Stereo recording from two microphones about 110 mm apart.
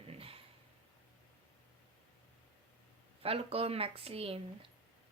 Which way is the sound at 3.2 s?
65° right (ahead or behind).